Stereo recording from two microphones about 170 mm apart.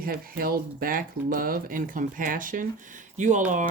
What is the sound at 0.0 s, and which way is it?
Speech, 60° right (ahead or behind).